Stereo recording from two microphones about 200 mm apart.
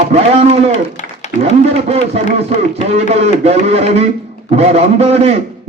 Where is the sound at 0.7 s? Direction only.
35° left (ahead or behind).